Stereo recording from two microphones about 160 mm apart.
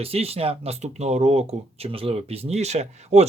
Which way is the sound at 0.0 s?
40° right (ahead or behind).